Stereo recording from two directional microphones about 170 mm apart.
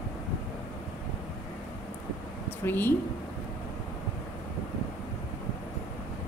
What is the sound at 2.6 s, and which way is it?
Speech, 10° left (ahead or behind).